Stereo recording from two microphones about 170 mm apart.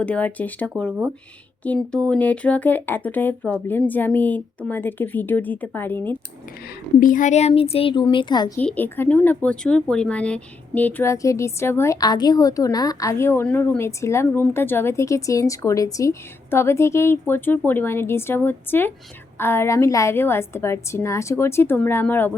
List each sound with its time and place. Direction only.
0.0 s speech: 5° left (ahead or behind)
7.0 s a woman's voice: 50° left (ahead or behind); by 8.5 s 25° left (ahead or behind)
8.5 s speech: 10° left (ahead or behind)